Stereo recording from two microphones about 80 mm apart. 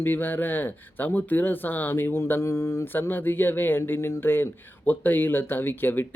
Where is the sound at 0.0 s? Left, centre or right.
Left.